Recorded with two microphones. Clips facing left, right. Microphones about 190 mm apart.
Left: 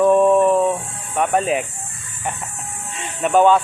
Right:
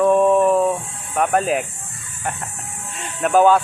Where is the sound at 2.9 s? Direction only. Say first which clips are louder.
Even; centre (ahead or behind).